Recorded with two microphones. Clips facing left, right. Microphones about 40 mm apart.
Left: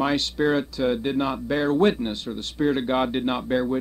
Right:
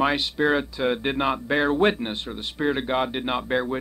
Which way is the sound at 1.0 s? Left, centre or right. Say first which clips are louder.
Right 1 dB; right.